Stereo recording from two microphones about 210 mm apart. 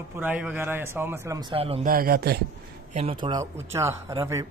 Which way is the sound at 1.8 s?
45° right (ahead or behind).